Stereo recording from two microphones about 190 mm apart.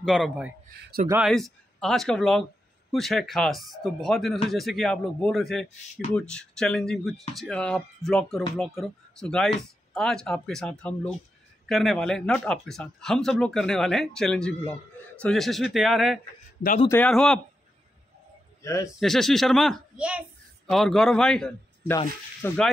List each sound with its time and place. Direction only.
0.0 s speech: centre (ahead or behind)
0.7 s a man's voice: 50° right (ahead or behind)
1.2 s speech: centre (ahead or behind)
18.6 s speech: 15° left (ahead or behind)
18.9 s speech: centre (ahead or behind)